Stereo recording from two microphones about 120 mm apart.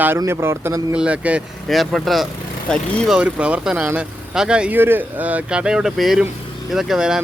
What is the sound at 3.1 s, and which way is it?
Speech, 10° right (ahead or behind).